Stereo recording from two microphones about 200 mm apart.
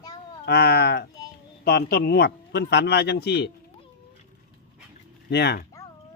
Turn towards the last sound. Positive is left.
turn(degrees=55)  # may be behind; listen again after turning